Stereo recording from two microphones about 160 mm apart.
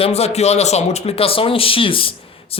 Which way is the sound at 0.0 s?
40° left (ahead or behind).